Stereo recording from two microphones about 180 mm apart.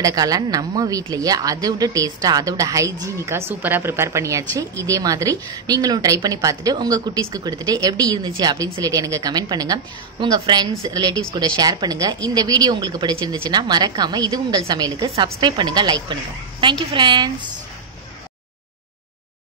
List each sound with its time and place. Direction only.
0.0 s speech: 20° right (ahead or behind)